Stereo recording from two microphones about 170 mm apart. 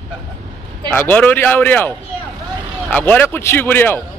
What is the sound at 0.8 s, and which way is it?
A man's voice, 10° left (ahead or behind).